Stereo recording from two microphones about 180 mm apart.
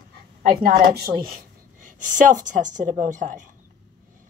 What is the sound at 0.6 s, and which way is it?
A woman's voice, 55° right (ahead or behind).